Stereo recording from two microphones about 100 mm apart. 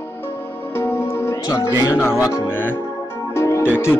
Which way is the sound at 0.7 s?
25° left (ahead or behind).